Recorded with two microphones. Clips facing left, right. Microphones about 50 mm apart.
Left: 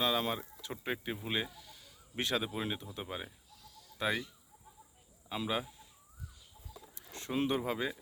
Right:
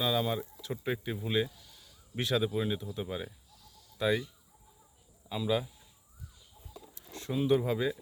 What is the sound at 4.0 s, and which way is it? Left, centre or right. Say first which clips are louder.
Speech: right 5 dB; left.